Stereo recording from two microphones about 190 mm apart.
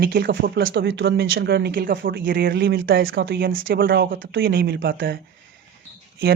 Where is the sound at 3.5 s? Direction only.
90° right.